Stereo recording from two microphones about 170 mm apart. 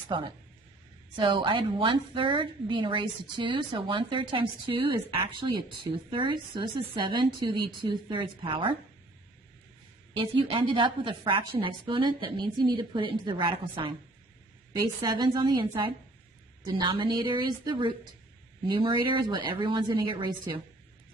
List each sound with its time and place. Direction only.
0.1 s a woman's voice: 25° right (ahead or behind)
10.2 s a woman's voice: 30° right (ahead or behind)
15.0 s a woman's voice: 25° right (ahead or behind)